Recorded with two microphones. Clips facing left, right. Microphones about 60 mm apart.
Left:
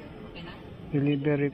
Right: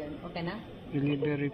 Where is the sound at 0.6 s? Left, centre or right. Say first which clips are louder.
Left 1 dB; left.